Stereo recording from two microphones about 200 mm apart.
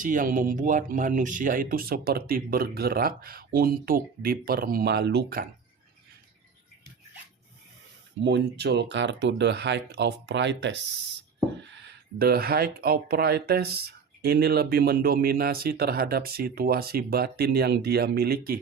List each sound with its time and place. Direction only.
0.0 s speech: 40° right (ahead or behind)
8.2 s speech: 60° right (ahead or behind)